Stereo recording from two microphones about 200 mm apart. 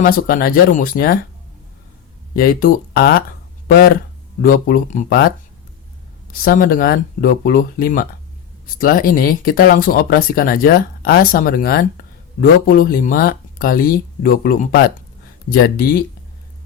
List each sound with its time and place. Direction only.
0.0 s speech: 45° left (ahead or behind)
2.3 s speech: 45° left (ahead or behind)
6.3 s speech: 45° left (ahead or behind)